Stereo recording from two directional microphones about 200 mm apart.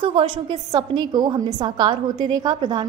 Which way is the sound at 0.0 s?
25° right (ahead or behind).